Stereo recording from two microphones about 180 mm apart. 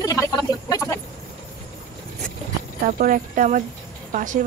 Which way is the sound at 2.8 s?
50° right (ahead or behind).